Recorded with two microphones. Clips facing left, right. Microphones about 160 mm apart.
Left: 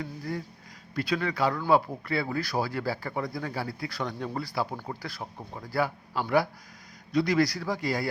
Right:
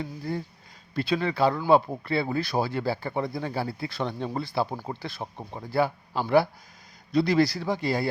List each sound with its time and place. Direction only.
0.0 s speech: 30° right (ahead or behind)